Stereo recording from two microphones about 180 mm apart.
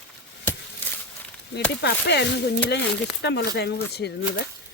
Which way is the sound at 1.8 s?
65° left (ahead or behind).